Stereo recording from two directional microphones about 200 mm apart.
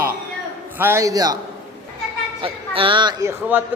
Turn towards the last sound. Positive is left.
turn(degrees=-10)  # may be behind; listen again after turning